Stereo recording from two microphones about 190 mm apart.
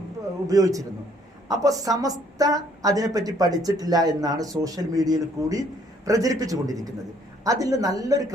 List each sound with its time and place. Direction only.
0.4 s a man's voice: 20° right (ahead or behind)